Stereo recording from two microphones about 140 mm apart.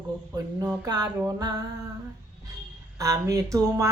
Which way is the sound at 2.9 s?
25° right (ahead or behind).